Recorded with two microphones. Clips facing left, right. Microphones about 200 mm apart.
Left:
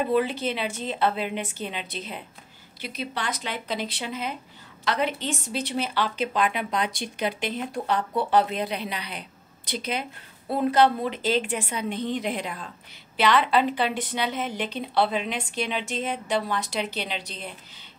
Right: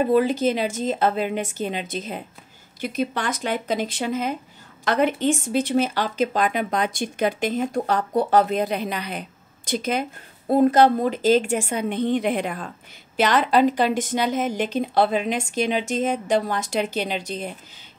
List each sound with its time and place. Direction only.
0.0 s a woman's voice: 45° right (ahead or behind)